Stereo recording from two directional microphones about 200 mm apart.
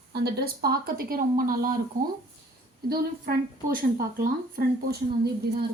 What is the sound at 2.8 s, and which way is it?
A woman's voice, 45° right (ahead or behind).